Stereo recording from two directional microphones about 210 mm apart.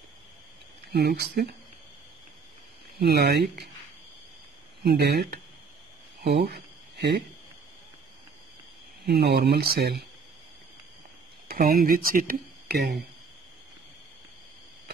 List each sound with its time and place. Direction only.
0.9 s speech: 50° right (ahead or behind)
3.0 s speech: 50° right (ahead or behind)
4.8 s speech: 50° right (ahead or behind)
9.0 s speech: 50° right (ahead or behind)
11.4 s speech: 45° right (ahead or behind)